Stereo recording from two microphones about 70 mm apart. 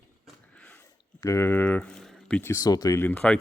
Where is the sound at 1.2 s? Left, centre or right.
Left.